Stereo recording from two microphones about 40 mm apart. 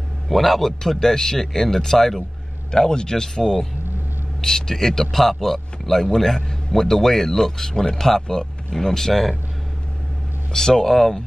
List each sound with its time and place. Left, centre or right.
0.3 s speech: centre
2.7 s speech: centre
10.5 s speech: centre